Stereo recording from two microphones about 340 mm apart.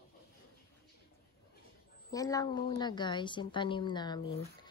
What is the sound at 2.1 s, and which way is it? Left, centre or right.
A woman's voice, centre.